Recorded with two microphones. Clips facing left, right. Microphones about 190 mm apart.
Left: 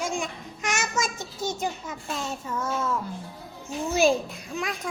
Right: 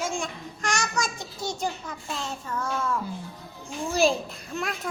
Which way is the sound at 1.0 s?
20° left (ahead or behind).